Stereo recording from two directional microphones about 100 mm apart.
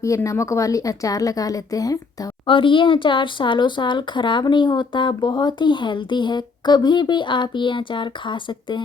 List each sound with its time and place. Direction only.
0.3 s speech: 30° left (ahead or behind)
2.5 s speech: 60° left (ahead or behind)